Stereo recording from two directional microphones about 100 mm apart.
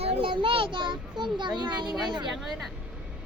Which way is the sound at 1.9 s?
5° right (ahead or behind).